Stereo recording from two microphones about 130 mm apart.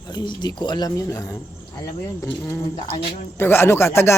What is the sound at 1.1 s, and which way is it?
Speech, 20° left (ahead or behind).